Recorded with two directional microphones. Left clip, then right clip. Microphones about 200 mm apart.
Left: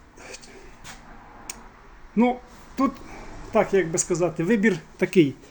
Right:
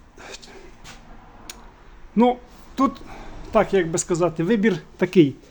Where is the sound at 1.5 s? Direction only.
15° right (ahead or behind).